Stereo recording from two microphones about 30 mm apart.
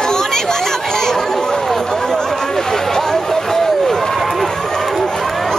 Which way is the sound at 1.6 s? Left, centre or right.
Centre.